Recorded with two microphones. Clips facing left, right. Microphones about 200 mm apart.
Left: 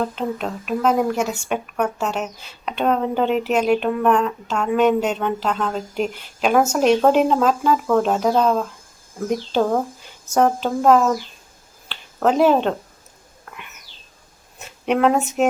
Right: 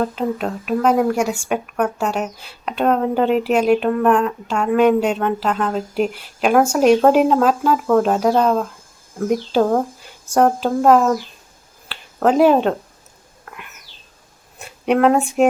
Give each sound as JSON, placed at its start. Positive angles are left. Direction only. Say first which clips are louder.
{"t": 0.0, "sound": "speech", "louder": "right 3 dB", "side_deg": -5}
{"t": 11.9, "sound": "finger snapping", "louder": "right 2 dB", "side_deg": -5}
{"t": 14.6, "sound": "speech", "louder": "right 3 dB", "side_deg": 0}